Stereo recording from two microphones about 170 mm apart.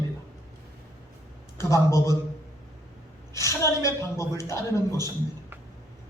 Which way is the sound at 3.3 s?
15° left (ahead or behind).